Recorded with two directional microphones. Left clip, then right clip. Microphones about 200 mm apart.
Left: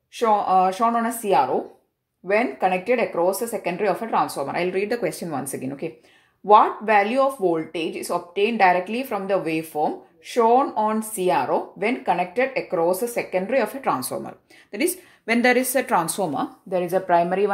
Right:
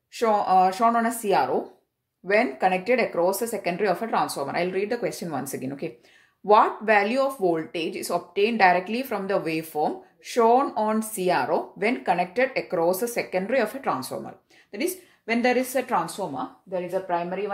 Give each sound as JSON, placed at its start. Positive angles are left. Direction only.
{"t": 0.1, "sound": "speech", "side_deg": 0}
{"t": 16.2, "sound": "speech", "side_deg": 50}